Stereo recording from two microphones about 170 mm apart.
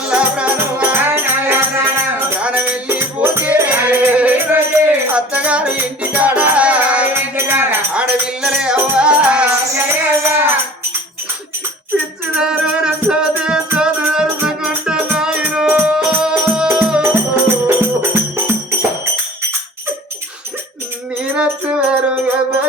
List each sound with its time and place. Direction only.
0.1 s music: 10° right (ahead or behind)
12.4 s music: 5° right (ahead or behind)
21.3 s music: 10° right (ahead or behind)